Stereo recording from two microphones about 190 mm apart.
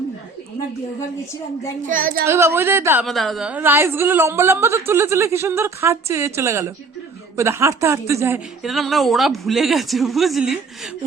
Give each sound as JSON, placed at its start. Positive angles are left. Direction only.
{"t": 1.9, "sound": "a child's voice", "side_deg": -45}
{"t": 2.2, "sound": "a woman's voice", "side_deg": -15}
{"t": 3.1, "sound": "a woman's voice", "side_deg": 0}
{"t": 8.6, "sound": "speech", "side_deg": 0}